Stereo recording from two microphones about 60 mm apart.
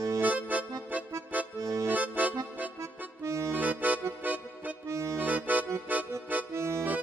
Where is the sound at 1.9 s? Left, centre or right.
Right.